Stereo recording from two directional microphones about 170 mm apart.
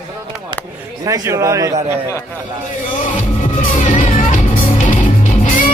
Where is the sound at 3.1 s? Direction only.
50° left (ahead or behind).